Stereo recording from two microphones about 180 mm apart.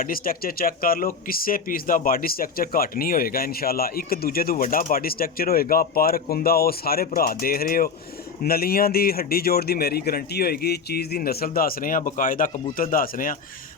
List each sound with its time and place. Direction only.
0.0 s speech: 55° left (ahead or behind)